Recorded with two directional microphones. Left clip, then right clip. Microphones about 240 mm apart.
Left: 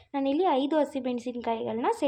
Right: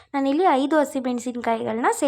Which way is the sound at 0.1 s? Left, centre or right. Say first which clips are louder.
Right 6 dB; centre.